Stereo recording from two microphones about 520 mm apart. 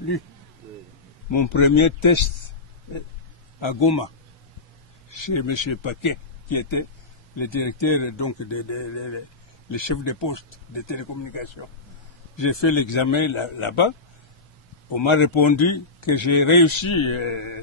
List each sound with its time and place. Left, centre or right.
1.3 s a man's voice: left
5.1 s a man's voice: left
15.0 s a man's voice: left